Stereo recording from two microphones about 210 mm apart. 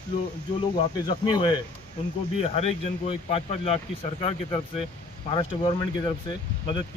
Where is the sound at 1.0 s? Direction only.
25° left (ahead or behind).